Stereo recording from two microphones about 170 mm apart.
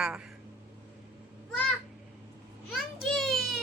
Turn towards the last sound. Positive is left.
turn(degrees=0)  # may be behind; listen again after turning